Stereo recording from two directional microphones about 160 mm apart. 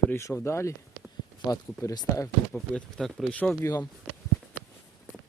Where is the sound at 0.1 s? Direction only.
15° left (ahead or behind).